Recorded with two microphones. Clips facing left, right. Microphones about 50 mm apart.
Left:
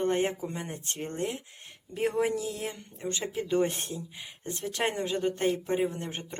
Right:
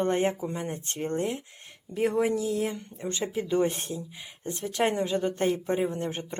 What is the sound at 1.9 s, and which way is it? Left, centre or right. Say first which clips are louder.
Speech: right 3 dB; centre.